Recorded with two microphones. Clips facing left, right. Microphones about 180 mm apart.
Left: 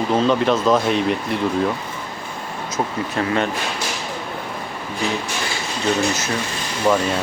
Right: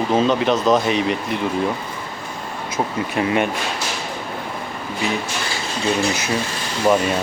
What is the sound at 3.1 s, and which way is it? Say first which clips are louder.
Speech: right 2 dB; 15° right (ahead or behind).